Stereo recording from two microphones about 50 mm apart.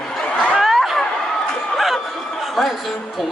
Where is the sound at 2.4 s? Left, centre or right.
Centre.